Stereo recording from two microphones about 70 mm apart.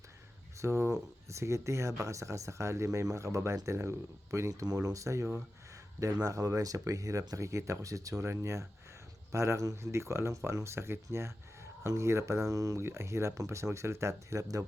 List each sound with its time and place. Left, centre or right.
0.5 s speech: right
6.2 s speech: right
12.8 s speech: right